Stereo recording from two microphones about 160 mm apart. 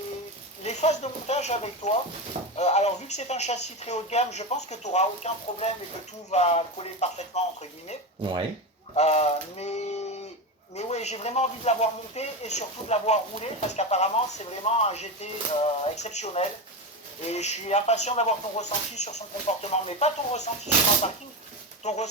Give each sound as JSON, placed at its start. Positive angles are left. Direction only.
{"t": 0.6, "sound": "speech", "side_deg": 45}
{"t": 9.0, "sound": "a sound", "side_deg": 40}
{"t": 10.8, "sound": "speech", "side_deg": 45}
{"t": 21.8, "sound": "speech", "side_deg": 45}